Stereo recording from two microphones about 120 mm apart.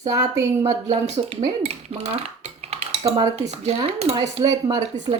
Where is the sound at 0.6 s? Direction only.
65° right (ahead or behind).